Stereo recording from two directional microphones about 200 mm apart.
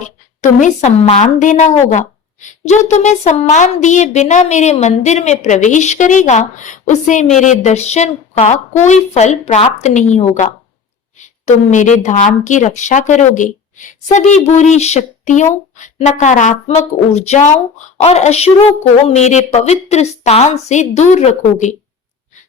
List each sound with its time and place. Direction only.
0.0 s a woman's voice: 35° left (ahead or behind)